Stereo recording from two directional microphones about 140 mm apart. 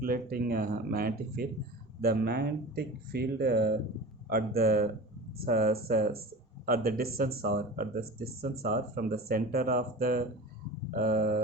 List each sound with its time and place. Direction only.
0.0 s speech: 90° right